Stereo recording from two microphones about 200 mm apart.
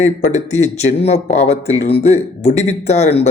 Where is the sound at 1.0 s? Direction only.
30° left (ahead or behind).